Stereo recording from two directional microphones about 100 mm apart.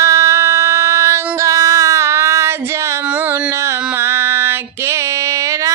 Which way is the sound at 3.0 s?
20° right (ahead or behind).